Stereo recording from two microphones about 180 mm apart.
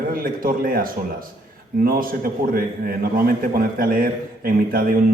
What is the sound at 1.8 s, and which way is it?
A man's voice, 55° right (ahead or behind).